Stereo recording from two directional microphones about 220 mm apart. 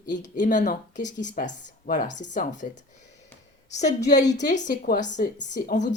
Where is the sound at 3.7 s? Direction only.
30° left (ahead or behind).